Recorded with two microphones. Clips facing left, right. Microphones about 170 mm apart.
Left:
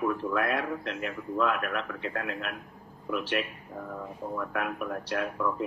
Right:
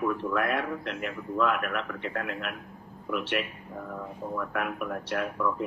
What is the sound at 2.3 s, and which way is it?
Speech, 35° left (ahead or behind).